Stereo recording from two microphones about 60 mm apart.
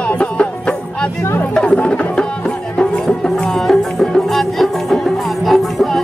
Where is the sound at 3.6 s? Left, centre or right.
Centre.